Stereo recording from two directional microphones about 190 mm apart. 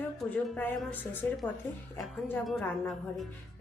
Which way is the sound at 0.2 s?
5° left (ahead or behind).